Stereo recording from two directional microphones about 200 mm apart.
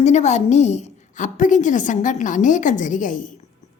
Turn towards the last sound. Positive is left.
turn(degrees=40)  # may be behind; listen again after turning